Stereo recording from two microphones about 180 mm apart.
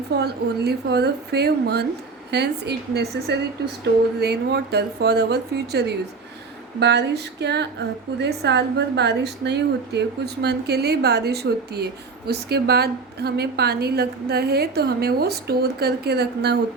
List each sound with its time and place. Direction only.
0.2 s speech: 65° right (ahead or behind)